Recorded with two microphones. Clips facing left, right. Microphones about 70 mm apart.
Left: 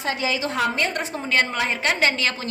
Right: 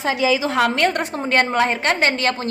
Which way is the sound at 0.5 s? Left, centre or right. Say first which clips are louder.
Right 5 dB; right.